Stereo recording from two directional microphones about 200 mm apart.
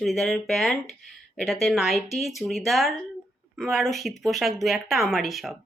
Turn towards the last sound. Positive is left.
turn(degrees=0)  # may be behind; listen again after turning